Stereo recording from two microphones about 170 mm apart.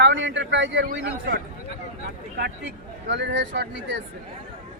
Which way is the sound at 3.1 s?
90° right.